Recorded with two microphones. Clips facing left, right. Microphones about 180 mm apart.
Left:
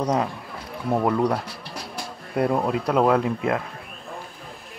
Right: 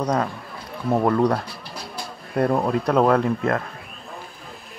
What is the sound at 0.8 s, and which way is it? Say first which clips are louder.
Speech: right 2 dB; 5° right (ahead or behind).